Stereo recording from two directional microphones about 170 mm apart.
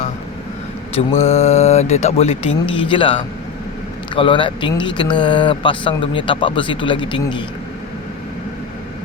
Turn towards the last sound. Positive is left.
turn(degrees=30)  # may be behind; listen again after turning